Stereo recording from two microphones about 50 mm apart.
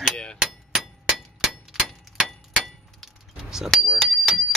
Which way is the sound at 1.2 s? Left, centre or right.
Centre.